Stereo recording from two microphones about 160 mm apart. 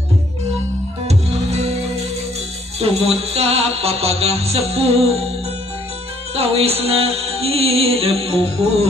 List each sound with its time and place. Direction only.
1.0 s music: 40° right (ahead or behind)
2.8 s music: 40° right (ahead or behind)
6.3 s music: 40° right (ahead or behind)